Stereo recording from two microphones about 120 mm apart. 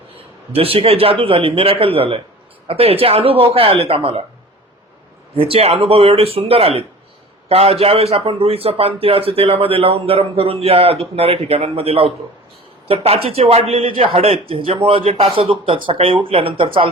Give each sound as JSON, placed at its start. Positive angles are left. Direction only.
{"t": 0.5, "sound": "speech", "side_deg": -55}
{"t": 5.4, "sound": "speech", "side_deg": -55}